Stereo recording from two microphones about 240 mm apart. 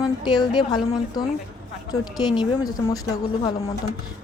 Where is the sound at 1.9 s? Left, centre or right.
Centre.